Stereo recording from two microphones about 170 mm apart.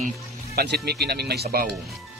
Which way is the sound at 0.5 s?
70° right (ahead or behind).